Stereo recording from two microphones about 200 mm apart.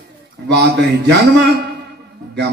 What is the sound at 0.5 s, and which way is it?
A man's voice, 55° right (ahead or behind).